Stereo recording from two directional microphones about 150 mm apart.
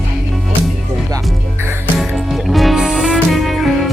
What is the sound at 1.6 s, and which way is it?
Music, 15° right (ahead or behind).